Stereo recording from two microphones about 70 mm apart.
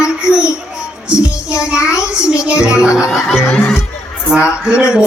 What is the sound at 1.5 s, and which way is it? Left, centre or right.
A child's voice, centre.